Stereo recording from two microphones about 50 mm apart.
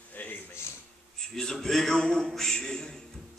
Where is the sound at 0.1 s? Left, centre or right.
Left.